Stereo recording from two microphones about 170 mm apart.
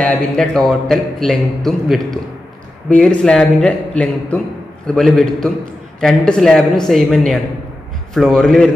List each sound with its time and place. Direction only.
0.0 s a man's voice: 5° left (ahead or behind)